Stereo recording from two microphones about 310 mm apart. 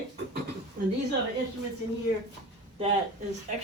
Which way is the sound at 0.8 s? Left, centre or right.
Right.